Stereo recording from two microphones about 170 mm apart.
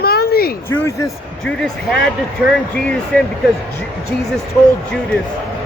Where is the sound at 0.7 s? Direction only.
15° left (ahead or behind).